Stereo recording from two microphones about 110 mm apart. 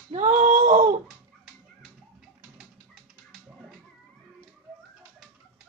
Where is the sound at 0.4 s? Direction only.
90° right.